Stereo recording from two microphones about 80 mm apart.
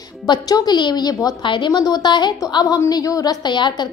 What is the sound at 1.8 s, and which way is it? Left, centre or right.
Speech, left.